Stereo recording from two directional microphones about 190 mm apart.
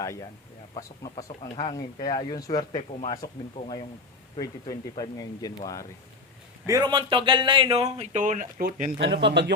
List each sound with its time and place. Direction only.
0.0 s speech: 15° left (ahead or behind)
3.2 s speech: 55° left (ahead or behind)
4.4 s speech: 20° left (ahead or behind)
6.7 s speech: 20° right (ahead or behind); by 9.0 s 50° right (ahead or behind)
9.0 s speech: 65° right (ahead or behind)